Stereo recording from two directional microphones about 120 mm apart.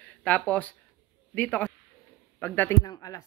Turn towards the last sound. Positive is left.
turn(degrees=30)  # may be behind; listen again after turning